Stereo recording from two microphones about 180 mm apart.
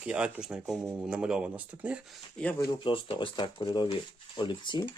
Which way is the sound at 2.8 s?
30° left (ahead or behind).